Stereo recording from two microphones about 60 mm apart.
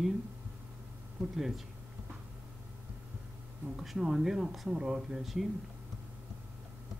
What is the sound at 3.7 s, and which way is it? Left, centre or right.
Speech, centre.